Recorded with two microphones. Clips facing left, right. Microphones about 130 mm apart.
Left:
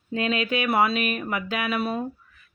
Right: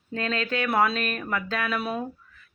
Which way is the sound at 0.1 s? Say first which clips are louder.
Left 3 dB; 15° left (ahead or behind).